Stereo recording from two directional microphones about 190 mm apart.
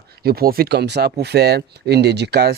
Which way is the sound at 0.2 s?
55° right (ahead or behind).